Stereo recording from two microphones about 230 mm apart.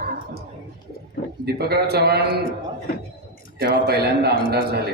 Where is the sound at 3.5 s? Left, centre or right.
Right.